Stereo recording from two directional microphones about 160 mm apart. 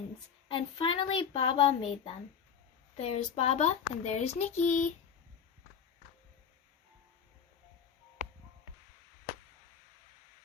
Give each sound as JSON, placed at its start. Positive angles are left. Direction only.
{"t": 0.4, "sound": "a woman's voice", "side_deg": 35}